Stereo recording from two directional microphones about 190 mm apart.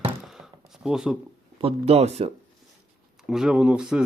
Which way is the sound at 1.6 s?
35° right (ahead or behind).